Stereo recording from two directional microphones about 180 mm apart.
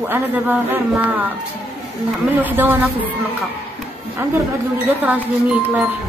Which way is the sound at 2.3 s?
10° right (ahead or behind).